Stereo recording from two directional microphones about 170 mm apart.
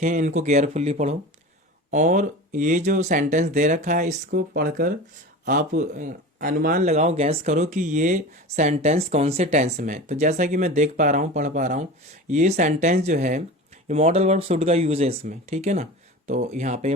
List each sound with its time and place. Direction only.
0.0 s speech: 45° right (ahead or behind); by 4.9 s 60° right (ahead or behind)
5.5 s speech: 50° right (ahead or behind)
6.8 s speech: 40° right (ahead or behind)